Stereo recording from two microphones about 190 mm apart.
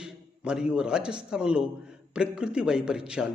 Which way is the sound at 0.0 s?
5° right (ahead or behind).